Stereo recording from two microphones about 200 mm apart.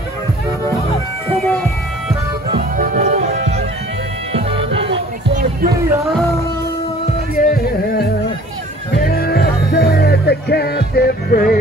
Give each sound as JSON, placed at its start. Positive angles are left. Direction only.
{"t": 2.8, "sound": "music", "side_deg": -40}
{"t": 5.3, "sound": "music", "side_deg": -45}
{"t": 7.3, "sound": "music", "side_deg": 45}